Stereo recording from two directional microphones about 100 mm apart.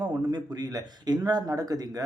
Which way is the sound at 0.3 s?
40° right (ahead or behind).